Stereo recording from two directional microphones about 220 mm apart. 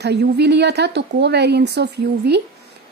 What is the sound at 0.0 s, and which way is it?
A woman's voice, 50° right (ahead or behind).